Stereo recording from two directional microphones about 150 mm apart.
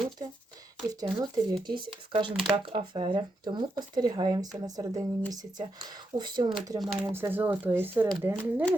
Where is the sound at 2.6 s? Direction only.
35° right (ahead or behind).